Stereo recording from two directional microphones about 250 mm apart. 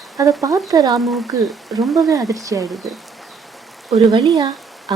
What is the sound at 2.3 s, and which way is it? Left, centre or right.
Speech, centre.